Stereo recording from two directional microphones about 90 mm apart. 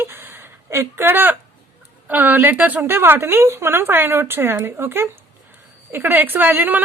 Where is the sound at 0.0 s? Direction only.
25° right (ahead or behind).